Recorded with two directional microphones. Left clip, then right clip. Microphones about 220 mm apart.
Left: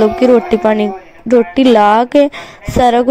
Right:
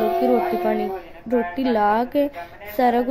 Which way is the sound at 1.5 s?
35° left (ahead or behind).